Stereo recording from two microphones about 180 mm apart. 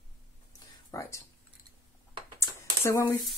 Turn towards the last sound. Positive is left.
turn(degrees=20)  # may be behind; listen again after turning